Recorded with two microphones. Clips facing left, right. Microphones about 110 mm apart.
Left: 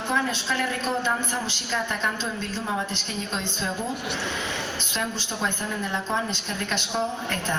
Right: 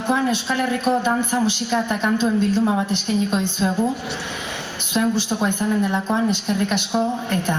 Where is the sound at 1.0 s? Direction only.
15° right (ahead or behind).